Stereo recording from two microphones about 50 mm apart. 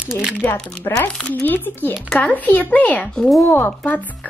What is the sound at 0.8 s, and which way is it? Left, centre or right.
Speech, left.